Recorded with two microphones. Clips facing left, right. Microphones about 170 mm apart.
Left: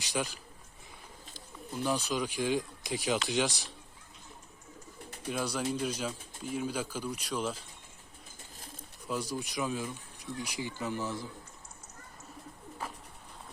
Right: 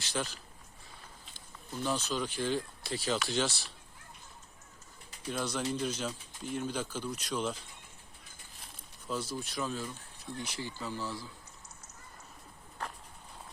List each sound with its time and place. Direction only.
0.0 s speech: 15° left (ahead or behind)
1.7 s speech: 10° left (ahead or behind)
5.3 s speech: 10° left (ahead or behind)
9.0 s speech: 15° left (ahead or behind)
12.8 s bird: 5° left (ahead or behind)